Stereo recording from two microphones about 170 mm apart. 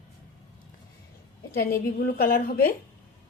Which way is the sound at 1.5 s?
60° left (ahead or behind).